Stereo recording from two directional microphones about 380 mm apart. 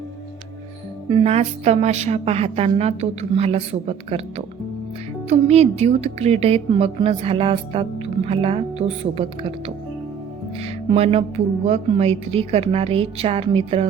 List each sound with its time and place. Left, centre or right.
1.1 s a woman's voice: centre